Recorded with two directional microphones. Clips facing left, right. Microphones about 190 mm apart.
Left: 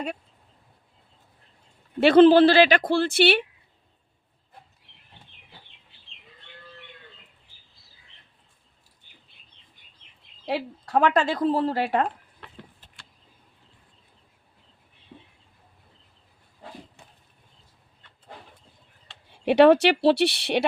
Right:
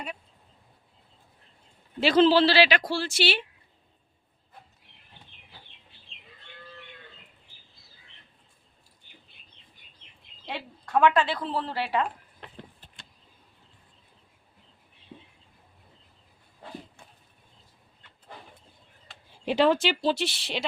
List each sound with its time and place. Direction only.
2.0 s speech: 55° left (ahead or behind)
10.5 s speech: 35° left (ahead or behind)
19.5 s speech: 65° left (ahead or behind)